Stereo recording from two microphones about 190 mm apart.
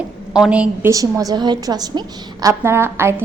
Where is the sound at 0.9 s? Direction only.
20° right (ahead or behind).